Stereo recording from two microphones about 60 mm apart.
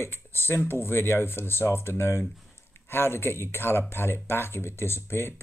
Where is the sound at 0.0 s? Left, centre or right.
Left.